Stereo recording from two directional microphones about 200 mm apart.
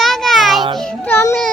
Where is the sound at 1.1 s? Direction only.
10° left (ahead or behind).